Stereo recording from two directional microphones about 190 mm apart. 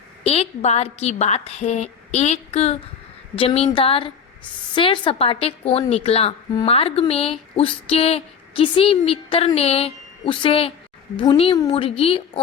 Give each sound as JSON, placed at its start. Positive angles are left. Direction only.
{"t": 0.3, "sound": "a woman's voice", "side_deg": 35}